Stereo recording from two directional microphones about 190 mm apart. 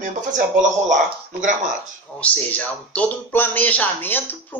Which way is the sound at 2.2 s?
5° left (ahead or behind).